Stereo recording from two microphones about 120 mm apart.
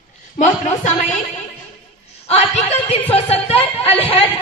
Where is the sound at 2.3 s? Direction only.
60° left (ahead or behind).